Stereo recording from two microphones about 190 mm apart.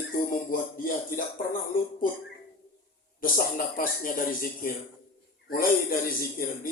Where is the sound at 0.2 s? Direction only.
45° left (ahead or behind).